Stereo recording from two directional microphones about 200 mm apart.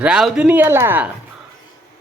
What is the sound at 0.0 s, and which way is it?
Speech, 5° right (ahead or behind).